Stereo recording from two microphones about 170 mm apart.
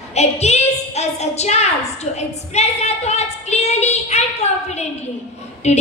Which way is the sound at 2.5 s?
40° left (ahead or behind).